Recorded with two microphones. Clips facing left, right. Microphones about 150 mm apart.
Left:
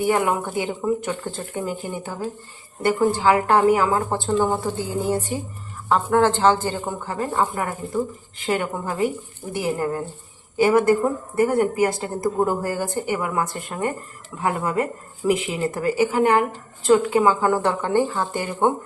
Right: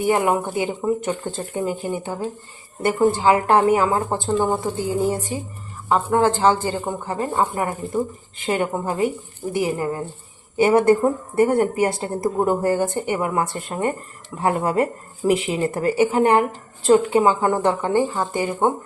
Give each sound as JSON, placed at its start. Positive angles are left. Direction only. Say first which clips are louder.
{"t": 0.1, "sound": "a woman's voice", "louder": "right 2 dB", "side_deg": -20}
{"t": 9.6, "sound": "speech", "louder": "even", "side_deg": -10}
{"t": 10.6, "sound": "a woman's voice", "louder": "right 2 dB", "side_deg": -25}